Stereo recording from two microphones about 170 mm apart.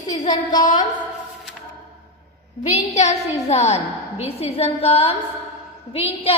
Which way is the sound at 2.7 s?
40° left (ahead or behind).